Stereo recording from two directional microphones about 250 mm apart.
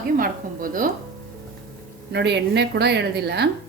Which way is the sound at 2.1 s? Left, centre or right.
Right.